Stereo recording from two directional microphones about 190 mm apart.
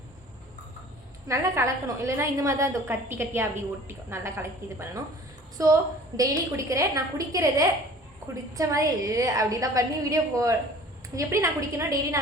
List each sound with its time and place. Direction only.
1.3 s a woman's voice: 15° right (ahead or behind)
5.6 s a woman's voice: 15° right (ahead or behind)